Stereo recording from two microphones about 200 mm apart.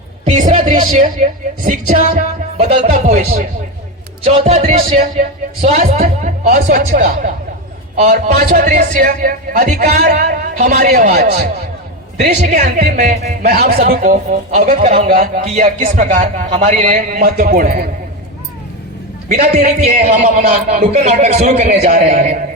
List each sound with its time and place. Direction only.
0.3 s music: 40° right (ahead or behind)
0.8 s a man's voice: 40° right (ahead or behind)
8.4 s a man's voice: 45° right (ahead or behind)
12.5 s a man's voice: 40° right (ahead or behind)
13.4 s a man's voice: 50° right (ahead or behind); by 15.1 s 35° right (ahead or behind)
15.1 s a man's voice: 45° right (ahead or behind)
19.3 s a man's voice: 40° right (ahead or behind)